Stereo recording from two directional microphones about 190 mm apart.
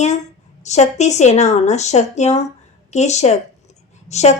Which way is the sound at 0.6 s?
35° left (ahead or behind).